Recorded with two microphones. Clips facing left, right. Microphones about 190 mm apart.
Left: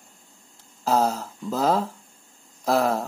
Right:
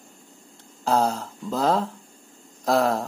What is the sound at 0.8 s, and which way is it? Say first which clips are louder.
Speech: even; 5° left (ahead or behind).